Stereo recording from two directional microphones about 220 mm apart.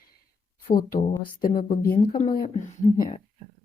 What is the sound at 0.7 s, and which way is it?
A woman's voice, 40° left (ahead or behind).